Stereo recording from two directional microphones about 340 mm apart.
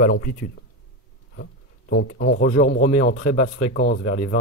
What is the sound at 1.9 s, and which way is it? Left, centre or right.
Speech, left.